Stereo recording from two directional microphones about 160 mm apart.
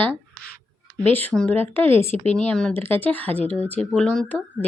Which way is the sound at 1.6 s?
35° right (ahead or behind).